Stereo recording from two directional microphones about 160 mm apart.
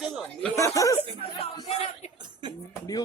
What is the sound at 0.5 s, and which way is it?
Speech, 20° left (ahead or behind).